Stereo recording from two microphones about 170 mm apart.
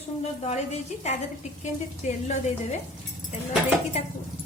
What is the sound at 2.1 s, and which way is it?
Speech, 40° left (ahead or behind).